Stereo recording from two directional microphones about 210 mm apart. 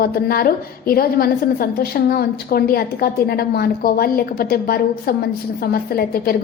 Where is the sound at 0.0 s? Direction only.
45° left (ahead or behind).